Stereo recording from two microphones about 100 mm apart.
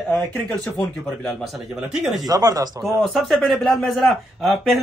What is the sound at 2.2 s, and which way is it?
Speech, 40° right (ahead or behind).